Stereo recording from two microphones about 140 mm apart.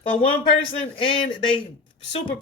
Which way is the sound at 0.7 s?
40° left (ahead or behind).